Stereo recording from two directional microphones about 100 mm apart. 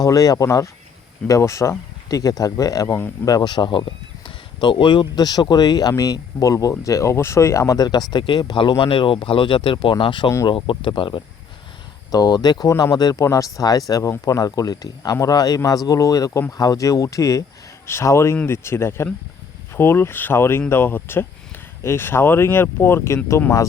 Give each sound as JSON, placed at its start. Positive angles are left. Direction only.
{"t": 0.0, "sound": "speech", "side_deg": 35}
{"t": 3.3, "sound": "speech", "side_deg": 50}
{"t": 10.2, "sound": "speech", "side_deg": 40}
{"t": 10.5, "sound": "speech", "side_deg": 60}
{"t": 12.1, "sound": "speech", "side_deg": 40}